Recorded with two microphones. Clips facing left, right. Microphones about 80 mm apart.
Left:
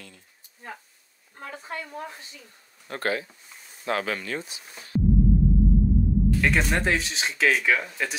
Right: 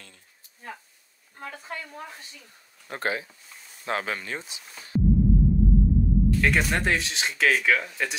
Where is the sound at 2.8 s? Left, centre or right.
Centre.